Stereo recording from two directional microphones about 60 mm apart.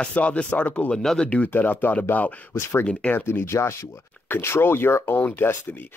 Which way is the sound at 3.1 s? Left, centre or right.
Left.